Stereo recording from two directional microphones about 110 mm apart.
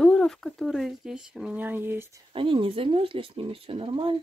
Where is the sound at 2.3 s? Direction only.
50° right (ahead or behind).